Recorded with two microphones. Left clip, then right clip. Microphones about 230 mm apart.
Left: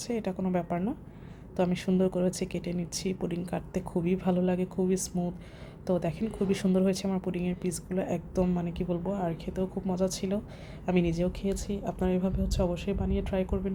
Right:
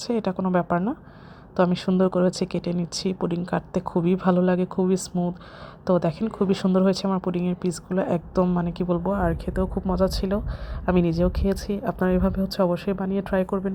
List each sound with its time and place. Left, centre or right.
0.0 s a woman's voice: centre